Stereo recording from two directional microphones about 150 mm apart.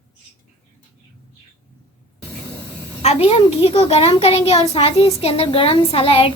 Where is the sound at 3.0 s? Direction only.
45° left (ahead or behind).